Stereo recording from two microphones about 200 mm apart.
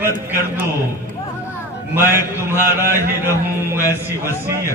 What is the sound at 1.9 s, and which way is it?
A man's voice, 10° right (ahead or behind).